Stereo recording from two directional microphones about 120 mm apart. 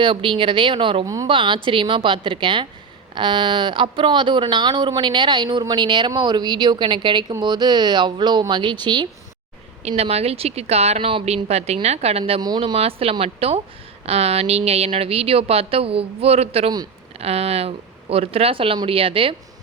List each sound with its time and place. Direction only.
0.0 s speech: 45° right (ahead or behind)
1.0 s a woman's voice: 30° right (ahead or behind)
1.3 s speech: 45° right (ahead or behind)
9.8 s a woman's voice: 60° right (ahead or behind)